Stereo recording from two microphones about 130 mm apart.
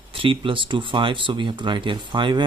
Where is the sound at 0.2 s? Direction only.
40° right (ahead or behind).